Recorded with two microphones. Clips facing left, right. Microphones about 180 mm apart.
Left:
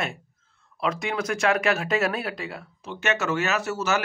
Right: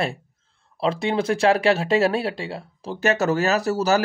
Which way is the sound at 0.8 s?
30° right (ahead or behind).